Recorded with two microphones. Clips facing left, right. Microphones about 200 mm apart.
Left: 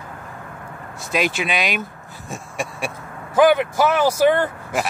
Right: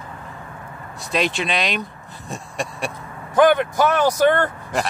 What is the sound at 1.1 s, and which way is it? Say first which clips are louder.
Speech: even; centre (ahead or behind).